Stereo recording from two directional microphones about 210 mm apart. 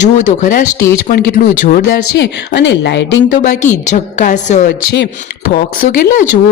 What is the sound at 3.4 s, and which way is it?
Speech, 35° left (ahead or behind).